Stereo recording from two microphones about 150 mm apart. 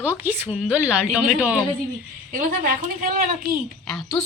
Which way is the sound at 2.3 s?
65° right (ahead or behind).